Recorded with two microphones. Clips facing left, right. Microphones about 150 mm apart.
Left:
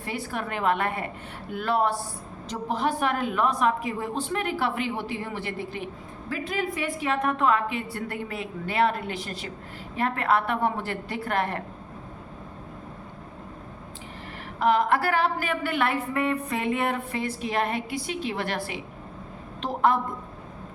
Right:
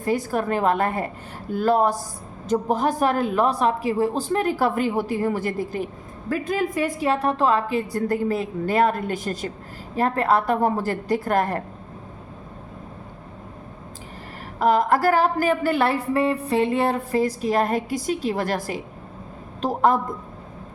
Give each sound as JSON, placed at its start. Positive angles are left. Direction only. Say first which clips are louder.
{"t": 0.0, "sound": "speech", "louder": "right 9 dB", "side_deg": -40}
{"t": 14.6, "sound": "speech", "louder": "right 4 dB", "side_deg": -40}